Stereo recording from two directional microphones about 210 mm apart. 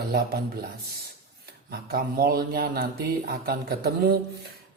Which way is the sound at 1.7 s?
45° right (ahead or behind).